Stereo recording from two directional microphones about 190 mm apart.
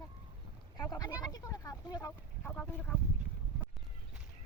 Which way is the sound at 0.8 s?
20° left (ahead or behind).